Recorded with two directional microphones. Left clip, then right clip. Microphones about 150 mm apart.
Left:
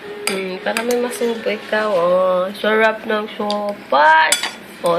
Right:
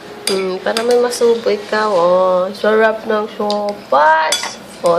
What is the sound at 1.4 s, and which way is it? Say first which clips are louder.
Speech: right 4 dB; 5° right (ahead or behind).